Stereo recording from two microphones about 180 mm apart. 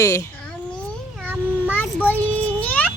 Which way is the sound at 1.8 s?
10° left (ahead or behind).